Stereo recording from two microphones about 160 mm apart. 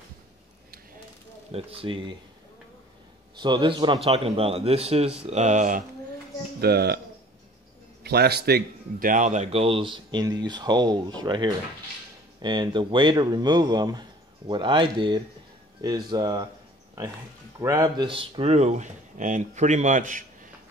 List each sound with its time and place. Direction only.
1.5 s a man's voice: 35° right (ahead or behind)
3.3 s a man's voice: 30° right (ahead or behind); by 5.9 s 55° right (ahead or behind)
6.6 s speech: 85° right
8.0 s a man's voice: 90° right; by 16.4 s 25° right (ahead or behind)
17.6 s speech: 20° right (ahead or behind); by 20.2 s 55° right (ahead or behind)